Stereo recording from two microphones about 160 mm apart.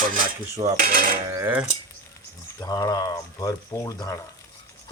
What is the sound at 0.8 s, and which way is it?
Cutlery, 65° right (ahead or behind).